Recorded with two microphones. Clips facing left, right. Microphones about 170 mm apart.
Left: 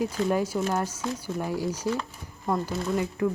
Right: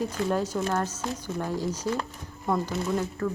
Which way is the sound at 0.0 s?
10° left (ahead or behind).